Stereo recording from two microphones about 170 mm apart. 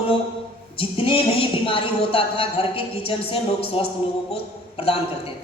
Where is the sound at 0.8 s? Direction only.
30° left (ahead or behind).